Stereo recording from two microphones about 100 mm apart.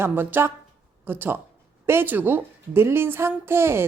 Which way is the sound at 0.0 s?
20° right (ahead or behind).